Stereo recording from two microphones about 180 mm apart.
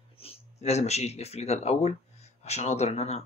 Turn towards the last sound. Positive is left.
turn(degrees=35)  # may be behind; listen again after turning